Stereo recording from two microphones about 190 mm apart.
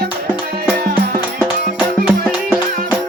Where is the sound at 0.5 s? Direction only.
50° right (ahead or behind).